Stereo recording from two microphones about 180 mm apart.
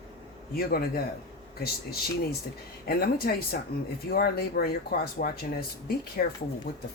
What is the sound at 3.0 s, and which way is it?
Speech, 55° left (ahead or behind).